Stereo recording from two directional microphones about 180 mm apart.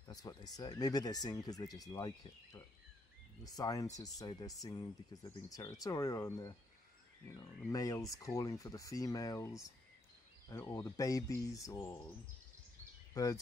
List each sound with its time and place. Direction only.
0.1 s speech: 20° left (ahead or behind)
13.1 s speech: 20° left (ahead or behind)